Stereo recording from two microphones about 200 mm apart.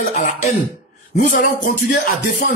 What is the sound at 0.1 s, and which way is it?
Throat clearing, 40° left (ahead or behind).